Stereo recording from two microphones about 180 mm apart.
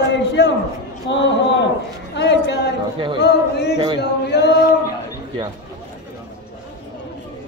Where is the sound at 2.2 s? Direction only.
80° left.